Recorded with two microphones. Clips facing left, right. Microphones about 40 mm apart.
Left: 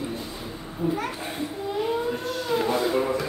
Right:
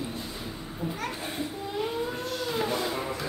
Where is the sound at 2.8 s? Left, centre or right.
Centre.